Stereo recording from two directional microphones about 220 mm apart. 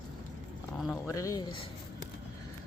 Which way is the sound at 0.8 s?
Centre (ahead or behind).